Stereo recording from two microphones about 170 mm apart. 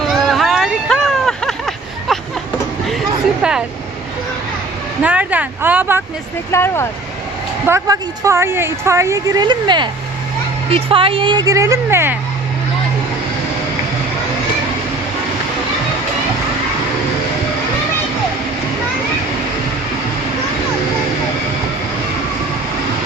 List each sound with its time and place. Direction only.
0.1 s a sound: centre (ahead or behind)
3.4 s vehicle: 5° right (ahead or behind)
5.0 s a woman's voice: 10° right (ahead or behind)
6.5 s speech: 15° left (ahead or behind)
7.7 s a woman's voice: 20° right (ahead or behind)